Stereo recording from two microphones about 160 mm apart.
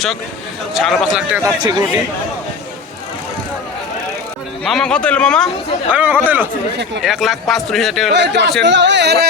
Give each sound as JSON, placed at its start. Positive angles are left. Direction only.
{"t": 0.7, "sound": "a man's voice", "side_deg": 0}
{"t": 1.4, "sound": "speech", "side_deg": -20}
{"t": 4.6, "sound": "a man's voice", "side_deg": 5}
{"t": 5.9, "sound": "a man's voice", "side_deg": -10}
{"t": 8.1, "sound": "speech", "side_deg": -90}